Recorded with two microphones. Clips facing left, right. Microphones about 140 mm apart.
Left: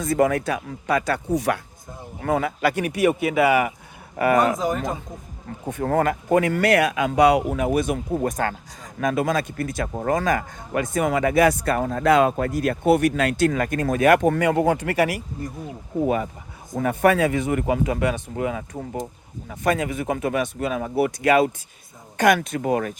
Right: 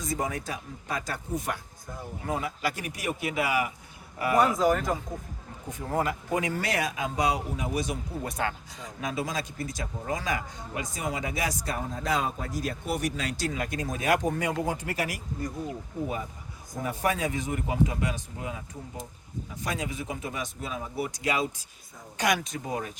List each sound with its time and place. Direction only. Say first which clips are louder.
0.0 s speech: left 11 dB; 65° left (ahead or behind)
4.5 s speech: even; 20° left (ahead or behind)
5.6 s speech: left 8 dB; 65° left (ahead or behind)
16.0 s speech: left 12 dB; 80° left
16.8 s speech: left 10 dB; 65° left (ahead or behind)
19.5 s speech: left 11 dB; 60° left (ahead or behind)